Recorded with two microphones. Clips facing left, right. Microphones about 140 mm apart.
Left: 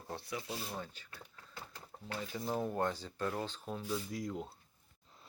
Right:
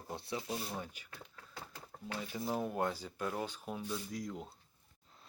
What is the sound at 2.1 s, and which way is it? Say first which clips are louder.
Speech: even; 10° right (ahead or behind).